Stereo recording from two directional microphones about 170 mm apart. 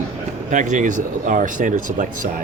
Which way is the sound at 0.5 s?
45° right (ahead or behind).